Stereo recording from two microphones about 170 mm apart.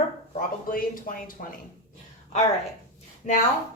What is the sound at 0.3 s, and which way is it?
Speech, 55° left (ahead or behind).